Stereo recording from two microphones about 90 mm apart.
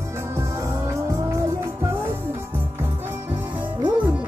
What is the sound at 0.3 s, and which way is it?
Music, 35° right (ahead or behind).